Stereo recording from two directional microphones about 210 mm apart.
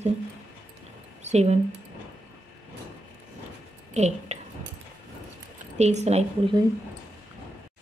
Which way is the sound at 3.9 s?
30° right (ahead or behind).